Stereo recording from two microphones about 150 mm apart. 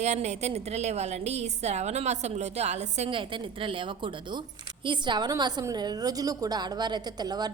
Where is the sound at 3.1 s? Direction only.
35° right (ahead or behind).